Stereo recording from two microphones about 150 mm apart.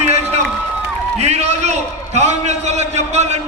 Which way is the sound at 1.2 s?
45° right (ahead or behind).